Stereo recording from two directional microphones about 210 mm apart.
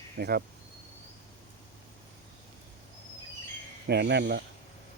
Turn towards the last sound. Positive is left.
turn(degrees=-50)  # may be behind; listen again after turning